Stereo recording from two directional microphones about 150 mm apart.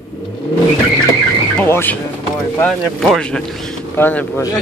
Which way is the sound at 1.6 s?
15° left (ahead or behind).